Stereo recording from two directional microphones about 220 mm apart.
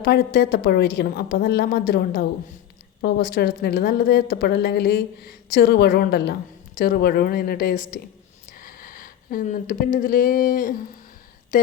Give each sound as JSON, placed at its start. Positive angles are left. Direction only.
{"t": 0.0, "sound": "speech", "side_deg": 45}